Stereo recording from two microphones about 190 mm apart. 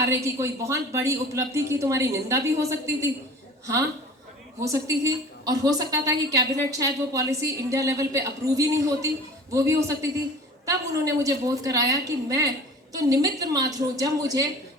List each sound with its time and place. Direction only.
0.1 s a woman's voice: 15° right (ahead or behind)
4.6 s a woman's voice: 15° right (ahead or behind)